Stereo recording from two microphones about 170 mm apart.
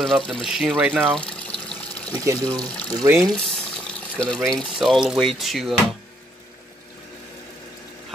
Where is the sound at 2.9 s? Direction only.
20° right (ahead or behind).